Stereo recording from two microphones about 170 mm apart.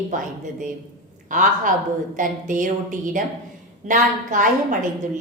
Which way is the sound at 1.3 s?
50° right (ahead or behind).